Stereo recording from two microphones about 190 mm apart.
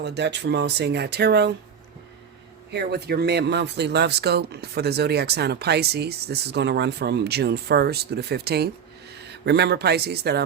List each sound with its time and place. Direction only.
0.0 s speech: 65° right (ahead or behind)
2.7 s speech: 60° right (ahead or behind)